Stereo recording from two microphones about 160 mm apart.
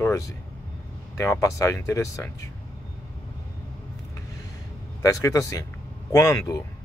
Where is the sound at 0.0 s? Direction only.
20° left (ahead or behind).